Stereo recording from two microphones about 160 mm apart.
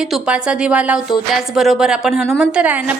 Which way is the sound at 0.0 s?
5° right (ahead or behind).